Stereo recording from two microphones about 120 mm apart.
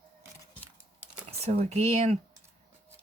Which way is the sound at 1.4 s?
60° right (ahead or behind).